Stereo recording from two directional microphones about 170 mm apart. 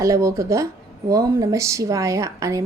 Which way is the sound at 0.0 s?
20° right (ahead or behind).